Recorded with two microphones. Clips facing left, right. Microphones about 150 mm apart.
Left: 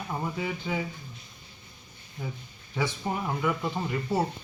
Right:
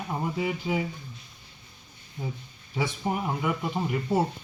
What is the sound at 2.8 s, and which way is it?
Speech, 10° right (ahead or behind).